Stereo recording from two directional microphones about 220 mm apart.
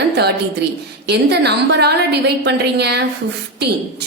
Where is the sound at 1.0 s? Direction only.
50° right (ahead or behind).